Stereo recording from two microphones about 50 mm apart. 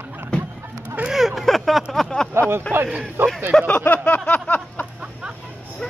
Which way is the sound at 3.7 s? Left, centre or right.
Left.